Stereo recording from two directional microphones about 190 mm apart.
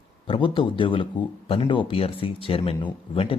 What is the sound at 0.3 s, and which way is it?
Speech, 25° left (ahead or behind).